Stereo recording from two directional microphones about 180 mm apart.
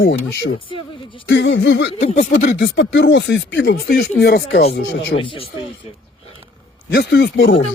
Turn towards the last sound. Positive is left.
turn(degrees=70)  # may be behind; listen again after turning